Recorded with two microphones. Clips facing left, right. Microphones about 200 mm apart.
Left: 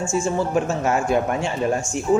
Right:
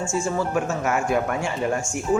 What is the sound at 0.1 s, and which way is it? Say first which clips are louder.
A man's voice: left 3 dB; 25° left (ahead or behind).